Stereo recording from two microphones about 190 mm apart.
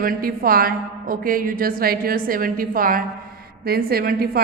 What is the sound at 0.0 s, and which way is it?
A woman's voice, 50° right (ahead or behind).